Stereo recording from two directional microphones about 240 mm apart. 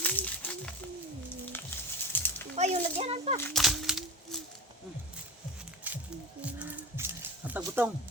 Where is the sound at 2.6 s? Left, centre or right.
Right.